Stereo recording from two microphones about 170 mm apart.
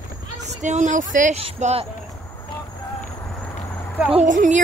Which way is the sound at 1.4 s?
35° right (ahead or behind).